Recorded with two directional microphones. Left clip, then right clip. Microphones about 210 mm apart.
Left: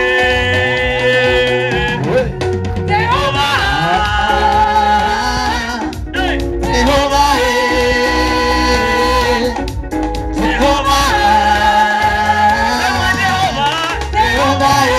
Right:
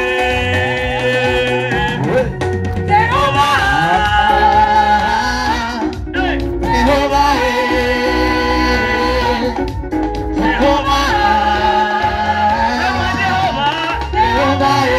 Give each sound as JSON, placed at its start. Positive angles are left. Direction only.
{"t": 0.0, "sound": "music", "side_deg": 35}
{"t": 2.9, "sound": "music", "side_deg": 35}
{"t": 6.7, "sound": "music", "side_deg": 50}